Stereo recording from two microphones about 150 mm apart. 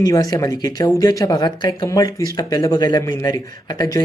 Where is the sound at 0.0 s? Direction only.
25° left (ahead or behind).